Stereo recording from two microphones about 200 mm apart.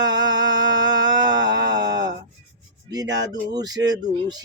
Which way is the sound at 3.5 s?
20° right (ahead or behind).